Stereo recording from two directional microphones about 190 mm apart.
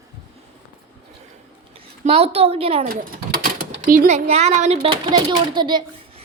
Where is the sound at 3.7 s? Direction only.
45° right (ahead or behind); by 5.8 s 25° right (ahead or behind).